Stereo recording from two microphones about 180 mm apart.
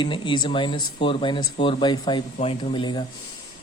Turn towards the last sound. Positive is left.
turn(degrees=25)  # may be behind; listen again after turning